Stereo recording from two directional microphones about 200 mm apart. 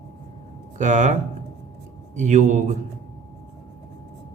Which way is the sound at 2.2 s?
35° right (ahead or behind).